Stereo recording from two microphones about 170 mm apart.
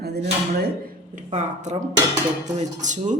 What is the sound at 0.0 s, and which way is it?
Speech, 70° right (ahead or behind).